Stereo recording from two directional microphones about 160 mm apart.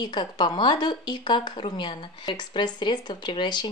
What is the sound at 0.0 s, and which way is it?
A woman's voice, 25° left (ahead or behind).